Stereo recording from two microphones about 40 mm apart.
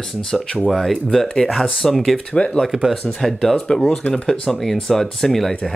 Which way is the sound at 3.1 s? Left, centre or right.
Centre.